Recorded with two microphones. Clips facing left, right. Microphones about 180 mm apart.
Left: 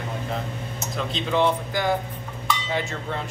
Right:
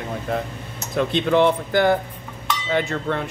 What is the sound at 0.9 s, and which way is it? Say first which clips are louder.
Speech: right 7 dB; 60° right (ahead or behind).